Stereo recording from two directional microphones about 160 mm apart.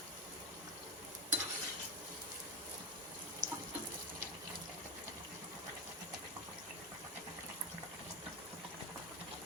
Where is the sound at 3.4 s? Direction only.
50° right (ahead or behind).